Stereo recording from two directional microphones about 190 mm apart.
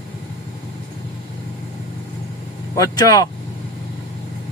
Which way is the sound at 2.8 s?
20° left (ahead or behind).